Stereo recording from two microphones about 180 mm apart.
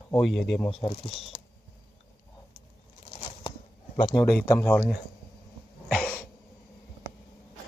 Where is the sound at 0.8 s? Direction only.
35° left (ahead or behind).